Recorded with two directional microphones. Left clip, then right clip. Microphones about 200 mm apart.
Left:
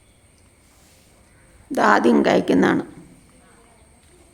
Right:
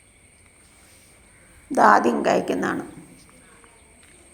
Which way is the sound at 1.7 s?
5° left (ahead or behind).